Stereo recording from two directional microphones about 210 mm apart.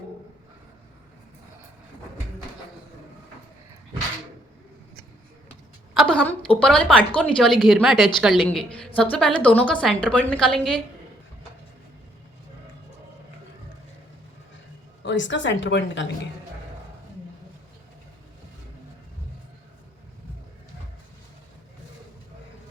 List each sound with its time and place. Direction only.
5.9 s a woman's voice: centre (ahead or behind)
15.0 s a woman's voice: 60° left (ahead or behind)